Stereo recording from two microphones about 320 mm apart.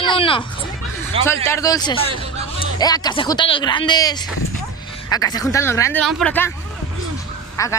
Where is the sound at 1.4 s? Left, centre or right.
Centre.